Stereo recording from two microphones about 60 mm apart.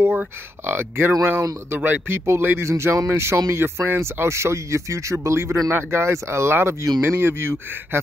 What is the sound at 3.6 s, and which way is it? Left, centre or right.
Speech, right.